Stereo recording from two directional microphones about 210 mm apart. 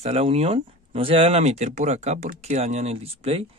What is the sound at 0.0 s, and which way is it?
Speech, 30° right (ahead or behind).